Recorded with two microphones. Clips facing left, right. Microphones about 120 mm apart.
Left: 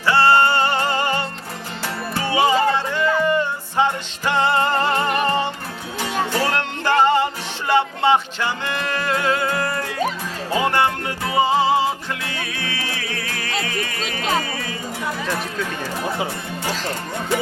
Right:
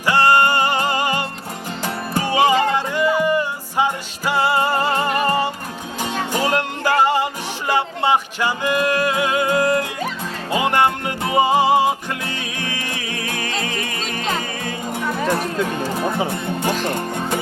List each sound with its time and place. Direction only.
0.0 s music: 15° right (ahead or behind)
13.4 s music: 45° right (ahead or behind)
13.7 s music: 25° right (ahead or behind)
16.0 s speech: 50° right (ahead or behind)
16.9 s speech: 20° right (ahead or behind)